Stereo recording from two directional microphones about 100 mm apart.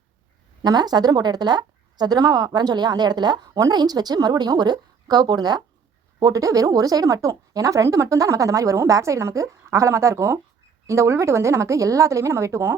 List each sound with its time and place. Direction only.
0.6 s a woman's voice: 45° right (ahead or behind); by 12.7 s 30° right (ahead or behind)